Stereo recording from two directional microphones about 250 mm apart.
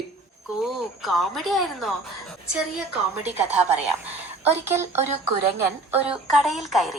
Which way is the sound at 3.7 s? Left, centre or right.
Right.